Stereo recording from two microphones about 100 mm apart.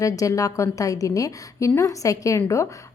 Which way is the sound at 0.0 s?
35° left (ahead or behind).